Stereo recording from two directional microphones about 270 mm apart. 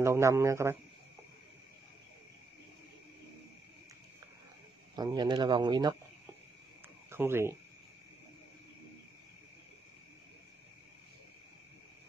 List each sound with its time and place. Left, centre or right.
0.0 s speech: centre
4.9 s speech: centre
7.1 s speech: centre